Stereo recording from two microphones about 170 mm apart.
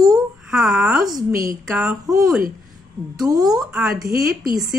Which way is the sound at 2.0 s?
20° right (ahead or behind).